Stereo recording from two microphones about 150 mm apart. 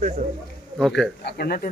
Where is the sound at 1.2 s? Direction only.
90° left.